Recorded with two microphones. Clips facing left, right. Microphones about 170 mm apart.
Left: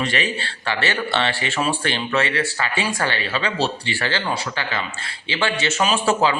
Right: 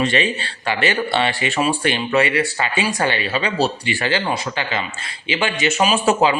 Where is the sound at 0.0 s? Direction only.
20° right (ahead or behind).